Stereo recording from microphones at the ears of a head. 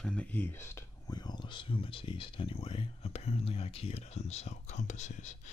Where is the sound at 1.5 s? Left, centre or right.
Left.